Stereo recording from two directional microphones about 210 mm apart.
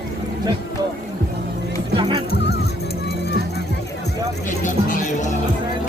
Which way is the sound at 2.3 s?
50° left (ahead or behind).